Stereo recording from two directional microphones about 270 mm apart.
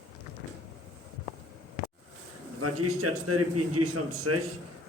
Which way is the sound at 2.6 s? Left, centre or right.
Right.